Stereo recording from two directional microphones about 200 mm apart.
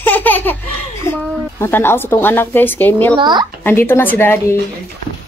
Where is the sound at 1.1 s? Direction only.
10° left (ahead or behind).